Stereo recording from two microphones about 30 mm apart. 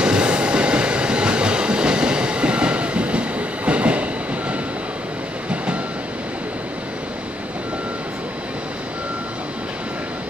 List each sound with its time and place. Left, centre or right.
0.0 s train: right